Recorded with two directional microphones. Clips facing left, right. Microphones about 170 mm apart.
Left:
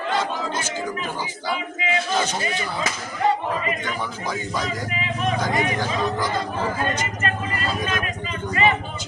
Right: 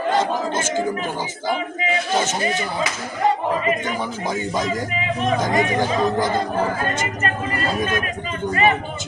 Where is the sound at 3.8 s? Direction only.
20° right (ahead or behind).